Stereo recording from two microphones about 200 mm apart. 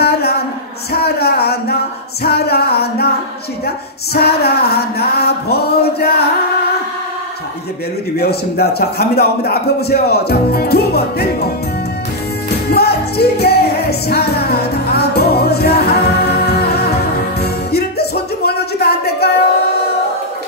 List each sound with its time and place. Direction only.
0.0 s a sound: 50° left (ahead or behind)
0.9 s music: 50° left (ahead or behind)
2.2 s a man's voice: 55° left (ahead or behind)
8.2 s a man's voice: 50° left (ahead or behind)
12.7 s music: 55° left (ahead or behind)